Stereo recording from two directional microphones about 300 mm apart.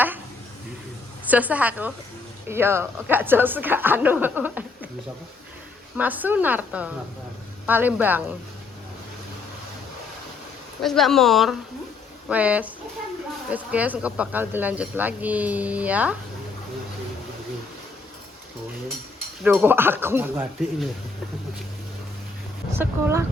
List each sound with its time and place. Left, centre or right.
1.3 s a woman's voice: centre
6.0 s speech: centre
10.8 s speech: centre
19.4 s a woman's voice: centre
22.8 s a woman's voice: centre